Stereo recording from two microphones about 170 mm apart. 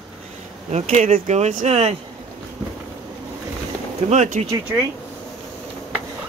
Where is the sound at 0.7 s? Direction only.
40° right (ahead or behind).